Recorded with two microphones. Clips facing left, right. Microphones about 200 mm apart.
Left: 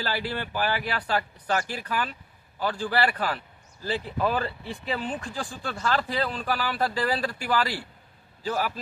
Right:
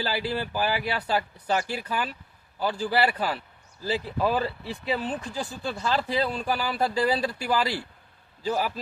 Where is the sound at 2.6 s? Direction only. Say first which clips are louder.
Right 1 dB; 5° right (ahead or behind).